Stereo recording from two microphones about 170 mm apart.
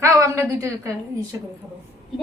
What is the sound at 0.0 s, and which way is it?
A woman's voice, 15° right (ahead or behind).